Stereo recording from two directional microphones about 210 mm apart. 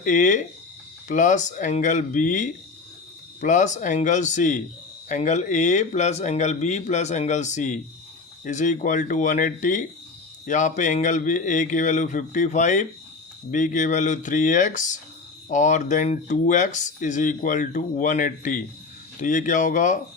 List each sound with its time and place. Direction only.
0.0 s speech: 35° left (ahead or behind)